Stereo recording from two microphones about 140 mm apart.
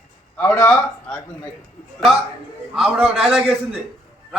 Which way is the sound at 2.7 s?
5° right (ahead or behind).